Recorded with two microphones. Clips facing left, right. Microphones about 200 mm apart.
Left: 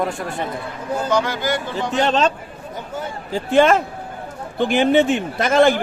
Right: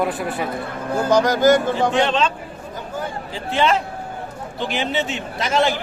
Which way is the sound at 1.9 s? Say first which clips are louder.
Left 6 dB; 40° left (ahead or behind).